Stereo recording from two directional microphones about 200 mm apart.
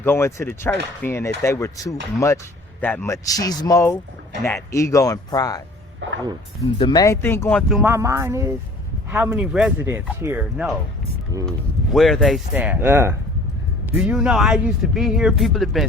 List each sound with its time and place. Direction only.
0.0 s speech: 10° left (ahead or behind)
6.0 s speech: 75° right (ahead or behind)
6.7 s speech: 20° left (ahead or behind)
7.7 s speech: 10° right (ahead or behind)
11.3 s speech: 15° right (ahead or behind)
11.9 s speech: centre (ahead or behind)